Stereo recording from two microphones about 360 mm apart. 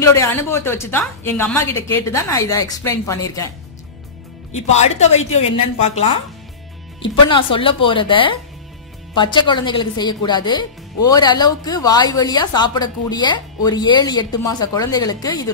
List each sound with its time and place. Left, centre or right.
0.0 s speech: centre
4.6 s a woman's voice: centre